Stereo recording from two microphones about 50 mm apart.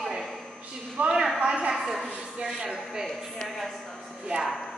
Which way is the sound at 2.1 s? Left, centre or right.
Centre.